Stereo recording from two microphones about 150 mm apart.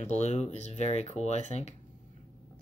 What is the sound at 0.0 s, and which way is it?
Speech, 50° left (ahead or behind).